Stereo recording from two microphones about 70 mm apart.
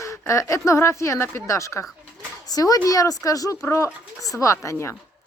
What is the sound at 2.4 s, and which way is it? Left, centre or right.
A woman's voice, left.